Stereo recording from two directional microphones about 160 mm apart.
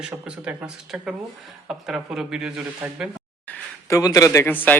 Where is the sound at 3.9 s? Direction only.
20° left (ahead or behind).